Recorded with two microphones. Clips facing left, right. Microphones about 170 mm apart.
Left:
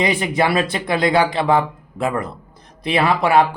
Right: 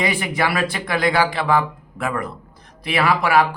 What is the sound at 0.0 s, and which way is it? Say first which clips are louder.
A man's voice: left 3 dB; 20° left (ahead or behind).